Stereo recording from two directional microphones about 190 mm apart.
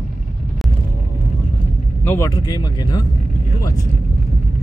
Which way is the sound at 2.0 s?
15° left (ahead or behind).